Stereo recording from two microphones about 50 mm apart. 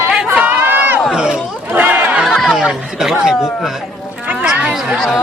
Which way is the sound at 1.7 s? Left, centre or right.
Right.